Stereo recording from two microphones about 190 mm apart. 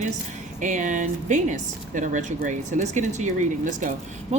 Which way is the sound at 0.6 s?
40° right (ahead or behind).